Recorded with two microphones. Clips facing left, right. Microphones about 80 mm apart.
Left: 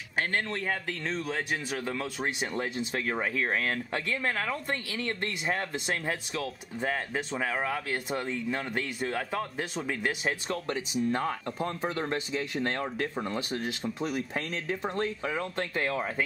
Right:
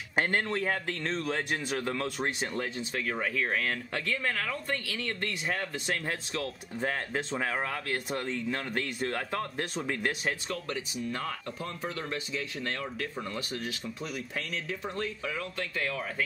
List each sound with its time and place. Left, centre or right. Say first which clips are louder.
0.5 s speech: right 2 dB; centre
2.9 s speech: left 2 dB; centre
5.9 s speech: left 1 dB; centre
10.5 s speech: left 4 dB; left